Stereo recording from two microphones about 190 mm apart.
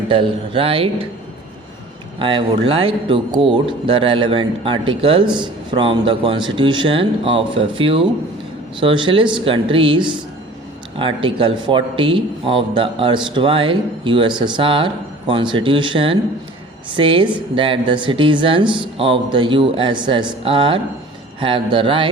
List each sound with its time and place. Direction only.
0.1 s speech: 25° right (ahead or behind)
2.1 s speech: 25° right (ahead or behind)